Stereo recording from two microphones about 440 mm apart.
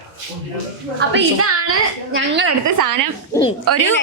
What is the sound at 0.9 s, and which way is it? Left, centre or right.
A woman's voice, right.